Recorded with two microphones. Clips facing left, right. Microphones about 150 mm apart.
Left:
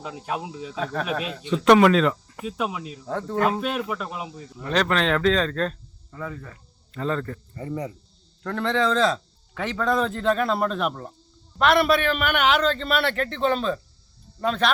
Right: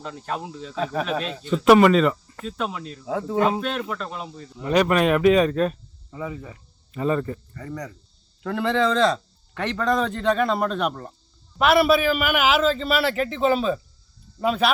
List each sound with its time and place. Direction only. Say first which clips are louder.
0.0 s speech: even; 5° left (ahead or behind)
0.8 s speech: right 3 dB; 10° right (ahead or behind)
1.2 s a man's voice: right 1 dB; 5° left (ahead or behind)
2.3 s speech: left 1 dB; 10° left (ahead or behind)
3.1 s a man's voice: right 2 dB; 5° right (ahead or behind)
3.3 s speech: right 2 dB; 15° right (ahead or behind)
3.6 s speech: even; 5° left (ahead or behind)
4.5 s speech: right 4 dB; 10° right (ahead or behind)
7.5 s cricket: left 3 dB; 25° left (ahead or behind)
8.4 s a man's voice: right 2 dB; 5° right (ahead or behind)